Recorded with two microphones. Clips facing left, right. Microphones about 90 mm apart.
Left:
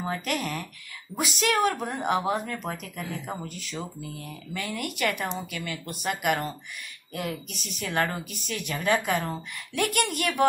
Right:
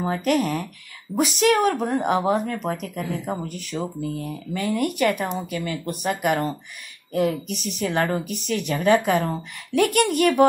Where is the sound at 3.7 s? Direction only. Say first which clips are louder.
Right 10 dB; 40° right (ahead or behind).